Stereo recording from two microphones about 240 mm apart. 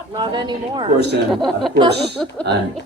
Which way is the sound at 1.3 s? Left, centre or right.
Centre.